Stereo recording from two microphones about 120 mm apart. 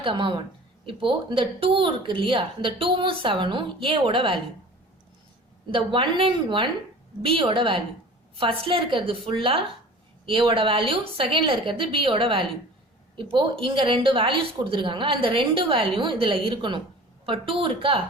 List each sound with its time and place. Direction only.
0.0 s a woman's voice: 45° right (ahead or behind)
5.7 s a woman's voice: 45° right (ahead or behind)